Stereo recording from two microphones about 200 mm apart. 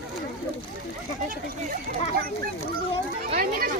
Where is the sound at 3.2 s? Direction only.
45° right (ahead or behind).